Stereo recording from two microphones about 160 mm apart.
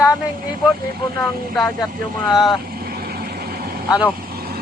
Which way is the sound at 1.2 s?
5° left (ahead or behind).